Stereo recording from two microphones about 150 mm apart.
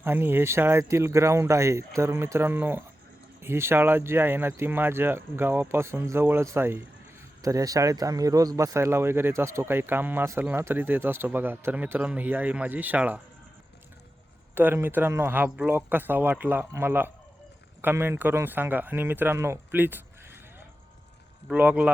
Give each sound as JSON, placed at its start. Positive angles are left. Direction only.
{"t": 0.0, "sound": "speech", "side_deg": -15}
{"t": 14.5, "sound": "speech", "side_deg": -15}
{"t": 21.4, "sound": "speech", "side_deg": -10}